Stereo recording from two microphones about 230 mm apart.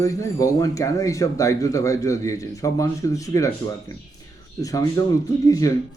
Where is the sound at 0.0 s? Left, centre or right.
Centre.